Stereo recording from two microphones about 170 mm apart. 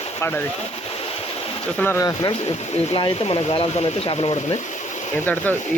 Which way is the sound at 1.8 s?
15° left (ahead or behind).